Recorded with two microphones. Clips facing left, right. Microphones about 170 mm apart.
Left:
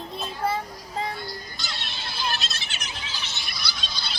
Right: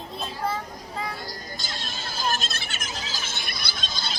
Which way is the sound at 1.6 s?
45° right (ahead or behind).